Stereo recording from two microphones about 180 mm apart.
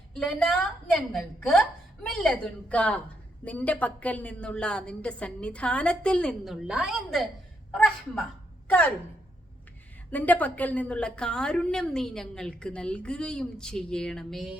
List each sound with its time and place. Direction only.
0.1 s a woman's voice: centre (ahead or behind)
8.6 s speech: 10° left (ahead or behind)
10.1 s a woman's voice: 10° left (ahead or behind)